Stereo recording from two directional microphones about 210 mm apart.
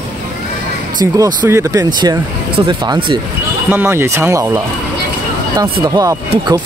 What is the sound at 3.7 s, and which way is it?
Speech, 10° right (ahead or behind).